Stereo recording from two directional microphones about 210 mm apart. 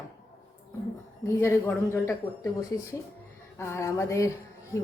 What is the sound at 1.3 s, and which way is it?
Speech, 15° left (ahead or behind).